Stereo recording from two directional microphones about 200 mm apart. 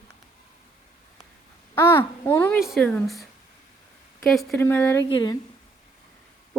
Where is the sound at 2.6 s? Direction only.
Centre (ahead or behind).